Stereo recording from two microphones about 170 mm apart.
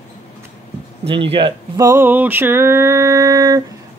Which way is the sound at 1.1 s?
35° right (ahead or behind).